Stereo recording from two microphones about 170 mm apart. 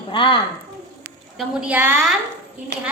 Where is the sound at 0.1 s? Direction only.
30° left (ahead or behind).